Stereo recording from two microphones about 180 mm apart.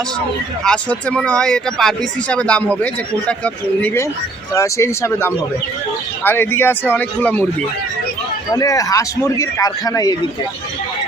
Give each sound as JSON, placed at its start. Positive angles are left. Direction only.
{"t": 0.6, "sound": "speech", "side_deg": 5}
{"t": 8.5, "sound": "a man's voice", "side_deg": 20}